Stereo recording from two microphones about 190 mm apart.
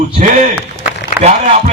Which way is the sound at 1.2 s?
10° right (ahead or behind).